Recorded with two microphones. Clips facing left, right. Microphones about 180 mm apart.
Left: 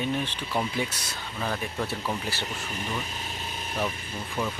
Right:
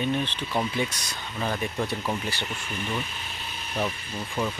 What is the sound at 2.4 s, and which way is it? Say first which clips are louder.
Speech: right 1 dB; 40° left (ahead or behind).